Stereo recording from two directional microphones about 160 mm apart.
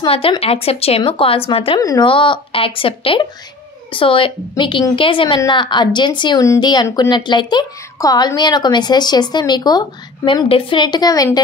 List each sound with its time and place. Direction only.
0.0 s speech: 35° left (ahead or behind)
1.8 s speech: 25° left (ahead or behind)